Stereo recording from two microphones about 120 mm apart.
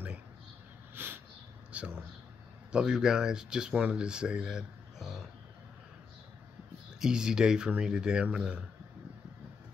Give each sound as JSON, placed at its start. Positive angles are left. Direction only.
{"t": 0.9, "sound": "snort", "side_deg": -15}
{"t": 1.7, "sound": "a sound", "side_deg": -15}
{"t": 2.7, "sound": "speech", "side_deg": -5}
{"t": 7.0, "sound": "speech", "side_deg": -5}